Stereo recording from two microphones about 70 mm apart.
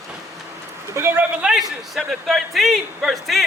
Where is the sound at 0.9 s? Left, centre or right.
Right.